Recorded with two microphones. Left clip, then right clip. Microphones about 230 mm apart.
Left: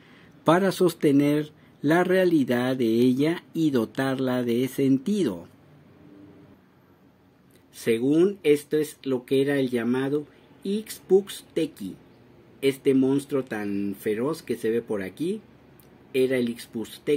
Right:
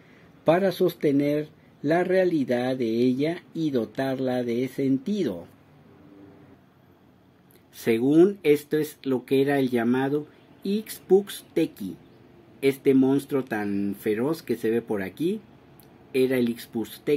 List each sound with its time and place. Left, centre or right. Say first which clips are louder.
0.5 s speech: even; centre
7.7 s speech: right 2 dB; centre